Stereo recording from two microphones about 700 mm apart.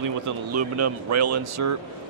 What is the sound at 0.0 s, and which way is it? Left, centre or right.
Speech, right.